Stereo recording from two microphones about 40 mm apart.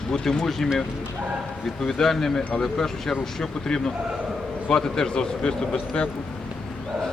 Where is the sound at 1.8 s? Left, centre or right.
Centre.